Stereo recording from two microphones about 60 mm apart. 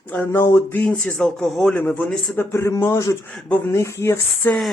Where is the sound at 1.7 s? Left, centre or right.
Left.